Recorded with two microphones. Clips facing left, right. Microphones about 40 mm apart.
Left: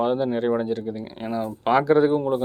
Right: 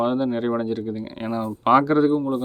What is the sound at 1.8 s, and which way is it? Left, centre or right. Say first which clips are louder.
Speech: left 1 dB; centre.